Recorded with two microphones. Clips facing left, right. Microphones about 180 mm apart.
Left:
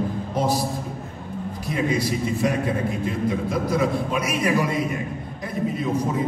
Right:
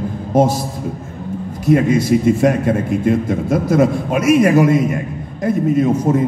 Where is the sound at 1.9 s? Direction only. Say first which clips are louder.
Right 10 dB; 45° right (ahead or behind).